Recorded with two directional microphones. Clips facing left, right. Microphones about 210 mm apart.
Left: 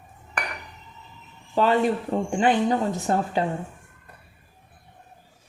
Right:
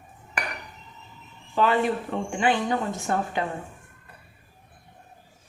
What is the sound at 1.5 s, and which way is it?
Speech, 40° left (ahead or behind).